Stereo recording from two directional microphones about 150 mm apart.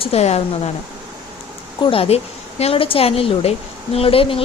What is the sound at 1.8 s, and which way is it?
Speech, 40° left (ahead or behind).